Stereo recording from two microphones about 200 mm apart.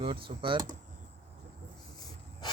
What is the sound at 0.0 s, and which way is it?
Speech, 25° right (ahead or behind).